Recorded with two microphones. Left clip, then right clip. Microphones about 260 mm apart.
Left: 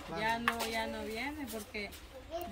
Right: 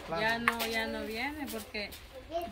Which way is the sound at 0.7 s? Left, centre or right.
Centre.